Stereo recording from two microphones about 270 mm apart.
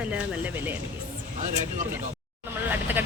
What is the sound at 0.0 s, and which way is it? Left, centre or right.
Speech, centre.